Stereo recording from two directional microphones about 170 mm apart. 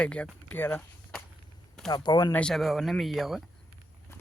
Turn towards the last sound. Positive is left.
turn(degrees=0)  # may be behind; listen again after turning